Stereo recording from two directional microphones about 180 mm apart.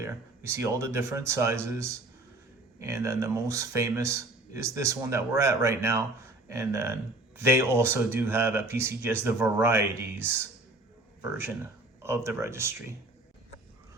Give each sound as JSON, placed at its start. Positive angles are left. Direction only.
{"t": 0.0, "sound": "speech", "side_deg": -15}